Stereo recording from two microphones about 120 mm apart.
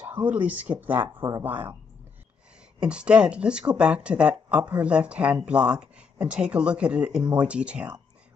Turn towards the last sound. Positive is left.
turn(degrees=-10)  # may be behind; listen again after turning